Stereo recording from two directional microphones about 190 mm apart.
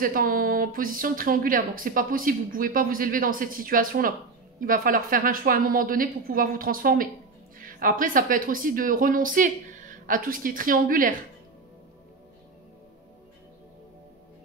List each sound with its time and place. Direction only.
0.0 s speech: 50° right (ahead or behind)